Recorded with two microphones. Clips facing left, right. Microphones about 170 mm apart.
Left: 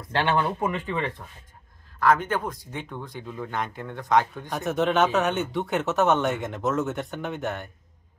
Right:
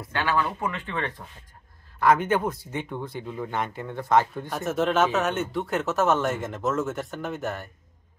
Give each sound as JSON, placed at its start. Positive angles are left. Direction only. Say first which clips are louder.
{"t": 0.1, "sound": "speech", "louder": "left 2 dB", "side_deg": 25}
{"t": 0.7, "sound": "speech", "louder": "left 2 dB", "side_deg": 10}
{"t": 2.0, "sound": "speech", "louder": "right 1 dB", "side_deg": -10}